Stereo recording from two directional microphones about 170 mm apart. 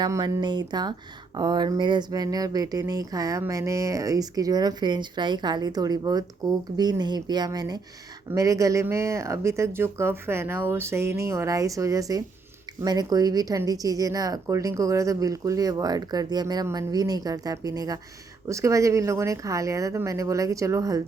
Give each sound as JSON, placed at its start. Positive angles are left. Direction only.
{"t": 0.0, "sound": "speech", "side_deg": -20}